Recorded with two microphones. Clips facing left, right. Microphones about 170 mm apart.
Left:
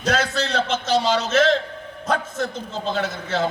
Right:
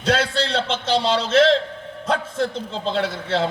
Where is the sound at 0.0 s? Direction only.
30° right (ahead or behind).